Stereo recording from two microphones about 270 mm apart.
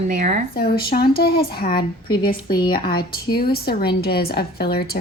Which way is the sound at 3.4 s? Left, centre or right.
Left.